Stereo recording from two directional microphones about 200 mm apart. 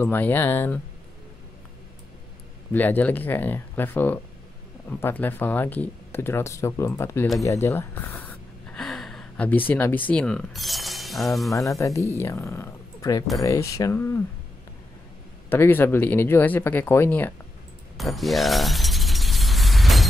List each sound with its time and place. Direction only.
0.0 s speech: 10° left (ahead or behind)
2.7 s speech: 10° left (ahead or behind)
7.4 s gasp: 10° left (ahead or behind)
9.7 s speech: 10° left (ahead or behind)
11.5 s speech: 15° left (ahead or behind)
15.5 s speech: 10° left (ahead or behind)
17.9 s mechanisms: centre (ahead or behind)